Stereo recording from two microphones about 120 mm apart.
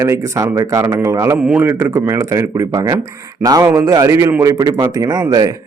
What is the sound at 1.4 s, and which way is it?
A man's voice, 10° right (ahead or behind).